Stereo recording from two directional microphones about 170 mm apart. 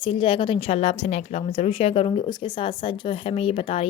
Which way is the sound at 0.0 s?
30° left (ahead or behind).